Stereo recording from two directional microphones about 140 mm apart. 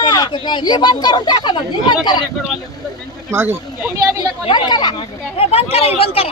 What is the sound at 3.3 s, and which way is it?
Speech, 15° right (ahead or behind).